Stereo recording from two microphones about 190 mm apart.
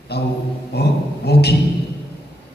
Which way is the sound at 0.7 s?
60° left (ahead or behind).